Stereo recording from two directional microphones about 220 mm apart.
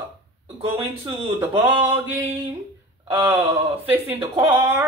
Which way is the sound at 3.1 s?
10° right (ahead or behind).